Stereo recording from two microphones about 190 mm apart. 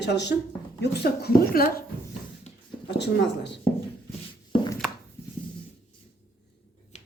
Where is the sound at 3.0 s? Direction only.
65° left (ahead or behind).